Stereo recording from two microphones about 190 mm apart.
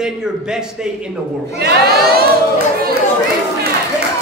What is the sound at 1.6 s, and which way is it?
Speech, 55° right (ahead or behind).